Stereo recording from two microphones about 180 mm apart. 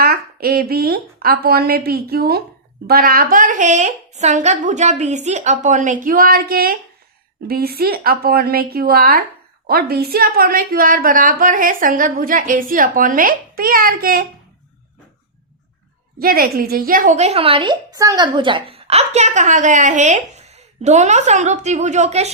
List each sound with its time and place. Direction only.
0.0 s a woman's voice: 55° right (ahead or behind)
16.1 s a woman's voice: 55° right (ahead or behind); by 22.3 s 40° right (ahead or behind)